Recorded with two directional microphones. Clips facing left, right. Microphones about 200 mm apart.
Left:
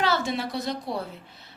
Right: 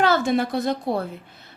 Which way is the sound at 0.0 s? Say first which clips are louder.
Right 6 dB; 50° right (ahead or behind).